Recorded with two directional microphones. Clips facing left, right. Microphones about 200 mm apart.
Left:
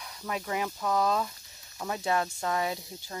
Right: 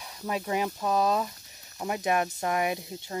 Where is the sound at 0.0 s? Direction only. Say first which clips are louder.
Right 3 dB; 20° right (ahead or behind).